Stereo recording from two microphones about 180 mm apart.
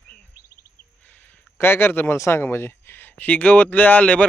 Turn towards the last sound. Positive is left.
turn(degrees=10)  # may be behind; listen again after turning